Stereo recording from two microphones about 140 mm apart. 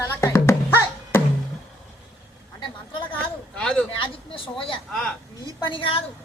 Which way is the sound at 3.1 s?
10° left (ahead or behind).